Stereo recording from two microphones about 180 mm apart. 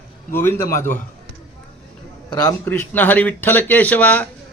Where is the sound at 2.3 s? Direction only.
25° left (ahead or behind).